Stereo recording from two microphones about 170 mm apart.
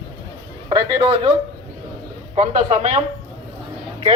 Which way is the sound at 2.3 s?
45° right (ahead or behind).